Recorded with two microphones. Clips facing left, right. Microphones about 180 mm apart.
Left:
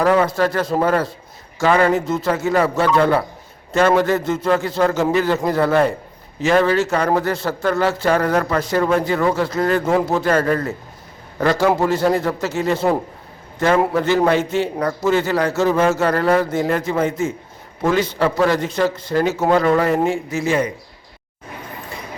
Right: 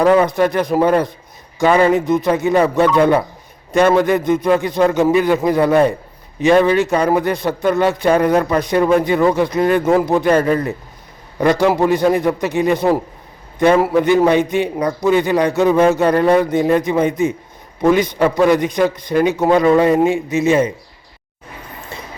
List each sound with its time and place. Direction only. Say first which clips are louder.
0.0 s a man's voice: right 3 dB; 20° right (ahead or behind)